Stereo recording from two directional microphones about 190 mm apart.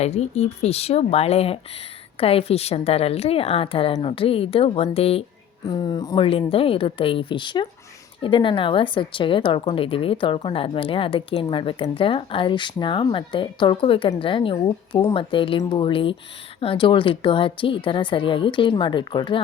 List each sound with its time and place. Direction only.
0.0 s a woman's voice: 35° left (ahead or behind)